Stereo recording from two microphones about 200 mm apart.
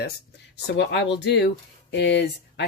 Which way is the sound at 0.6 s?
60° left (ahead or behind).